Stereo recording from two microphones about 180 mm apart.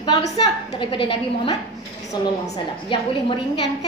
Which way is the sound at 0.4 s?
30° left (ahead or behind).